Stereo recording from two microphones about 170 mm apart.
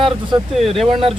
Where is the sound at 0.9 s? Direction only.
30° right (ahead or behind).